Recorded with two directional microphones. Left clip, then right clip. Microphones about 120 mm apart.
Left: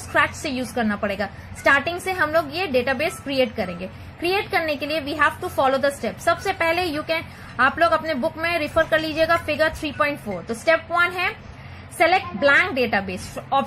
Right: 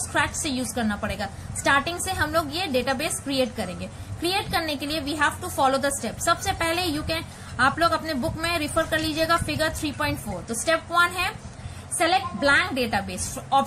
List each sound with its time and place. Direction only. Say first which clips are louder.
0.1 s a woman's voice: left 5 dB; 45° left (ahead or behind)